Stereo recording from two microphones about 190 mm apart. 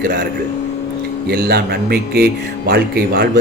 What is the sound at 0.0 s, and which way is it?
Speech, 45° right (ahead or behind).